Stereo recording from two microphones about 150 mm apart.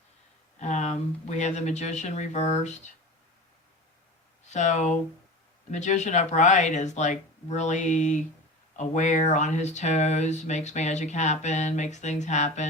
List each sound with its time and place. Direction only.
0.6 s speech: 50° left (ahead or behind)
4.4 s speech: 50° left (ahead or behind)